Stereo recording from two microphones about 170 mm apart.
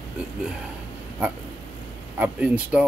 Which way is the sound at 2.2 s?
10° right (ahead or behind).